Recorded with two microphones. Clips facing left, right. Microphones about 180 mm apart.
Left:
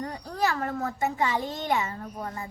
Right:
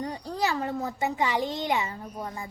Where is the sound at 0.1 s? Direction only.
20° right (ahead or behind).